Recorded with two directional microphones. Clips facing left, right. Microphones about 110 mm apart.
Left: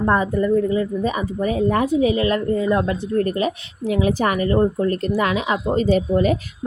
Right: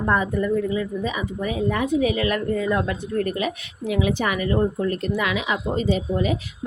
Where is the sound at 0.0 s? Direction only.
30° left (ahead or behind).